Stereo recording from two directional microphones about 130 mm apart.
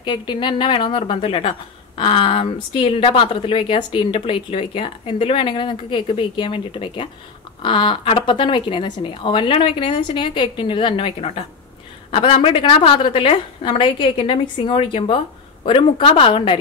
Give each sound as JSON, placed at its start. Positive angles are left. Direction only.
{"t": 0.0, "sound": "a woman's voice", "side_deg": 35}